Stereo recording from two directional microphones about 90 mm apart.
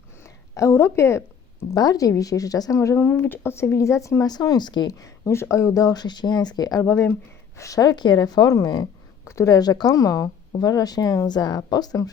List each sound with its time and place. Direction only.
0.5 s speech: 30° left (ahead or behind)
1.7 s speech: 45° left (ahead or behind)
4.9 s speech: 35° left (ahead or behind)
9.2 s speech: 35° left (ahead or behind)